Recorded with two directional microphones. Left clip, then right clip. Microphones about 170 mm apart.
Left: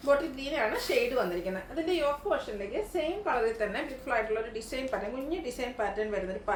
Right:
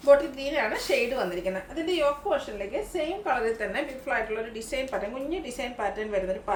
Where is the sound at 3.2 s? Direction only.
15° right (ahead or behind).